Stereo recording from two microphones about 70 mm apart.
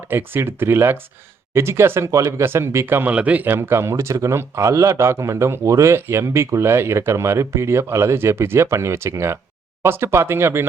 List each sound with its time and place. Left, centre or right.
0.1 s speech: right
2.0 s speech: right
2.4 s speech: right
3.6 s speech: right